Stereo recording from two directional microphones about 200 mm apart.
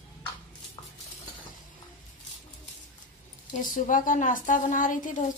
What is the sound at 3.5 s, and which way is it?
A woman's voice, 40° left (ahead or behind).